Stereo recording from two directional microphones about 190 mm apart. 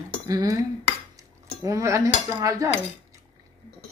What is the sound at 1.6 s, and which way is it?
Cutlery, 15° right (ahead or behind).